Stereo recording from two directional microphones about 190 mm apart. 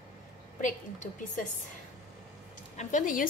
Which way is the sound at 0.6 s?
45° left (ahead or behind).